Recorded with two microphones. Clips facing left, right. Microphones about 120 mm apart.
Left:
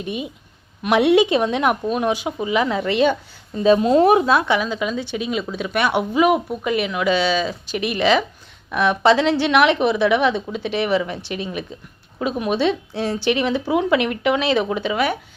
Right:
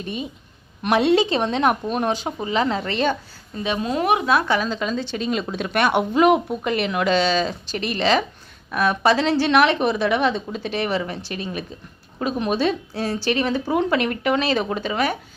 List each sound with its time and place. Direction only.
0.0 s speech: 10° left (ahead or behind)
3.6 s a woman's voice: 30° left (ahead or behind); by 15.1 s 15° left (ahead or behind)